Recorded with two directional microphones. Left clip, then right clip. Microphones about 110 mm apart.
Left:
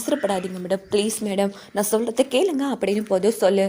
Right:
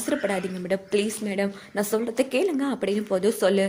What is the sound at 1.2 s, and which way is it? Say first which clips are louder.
Speech: left 4 dB; 70° left (ahead or behind).